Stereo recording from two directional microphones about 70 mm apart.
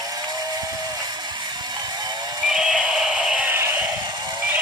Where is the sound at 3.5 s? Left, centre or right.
Right.